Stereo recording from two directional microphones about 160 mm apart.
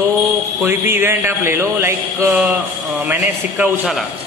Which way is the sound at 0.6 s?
15° right (ahead or behind).